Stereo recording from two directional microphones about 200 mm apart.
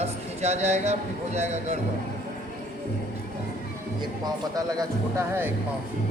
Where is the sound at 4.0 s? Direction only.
20° right (ahead or behind).